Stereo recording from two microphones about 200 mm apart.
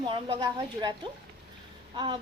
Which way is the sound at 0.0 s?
25° right (ahead or behind).